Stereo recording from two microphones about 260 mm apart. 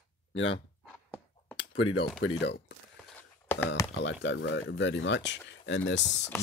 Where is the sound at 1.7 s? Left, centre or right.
Left.